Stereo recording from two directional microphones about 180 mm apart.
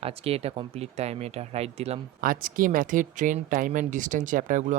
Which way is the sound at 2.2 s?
50° right (ahead or behind).